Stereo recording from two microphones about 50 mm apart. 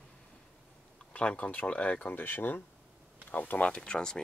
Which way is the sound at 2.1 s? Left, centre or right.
Left.